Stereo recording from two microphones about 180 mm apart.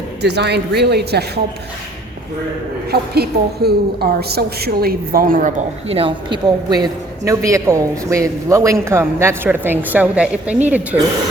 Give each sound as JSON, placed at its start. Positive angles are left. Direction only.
{"t": 0.2, "sound": "a woman's voice", "side_deg": -70}
{"t": 2.9, "sound": "a woman's voice", "side_deg": -60}
{"t": 5.9, "sound": "a man's voice", "side_deg": -30}